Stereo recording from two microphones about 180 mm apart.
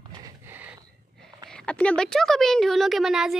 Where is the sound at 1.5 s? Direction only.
5° left (ahead or behind).